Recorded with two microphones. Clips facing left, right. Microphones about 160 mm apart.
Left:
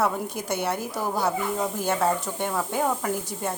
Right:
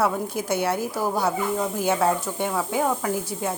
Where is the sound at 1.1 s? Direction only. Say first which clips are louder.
Left 1 dB; 5° left (ahead or behind).